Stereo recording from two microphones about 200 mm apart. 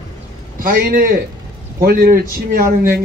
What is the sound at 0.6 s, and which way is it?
A man's voice, 45° right (ahead or behind).